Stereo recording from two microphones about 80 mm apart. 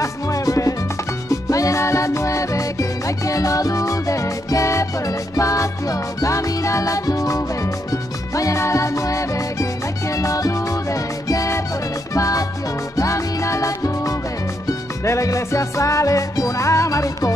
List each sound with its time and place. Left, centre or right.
0.0 s music: left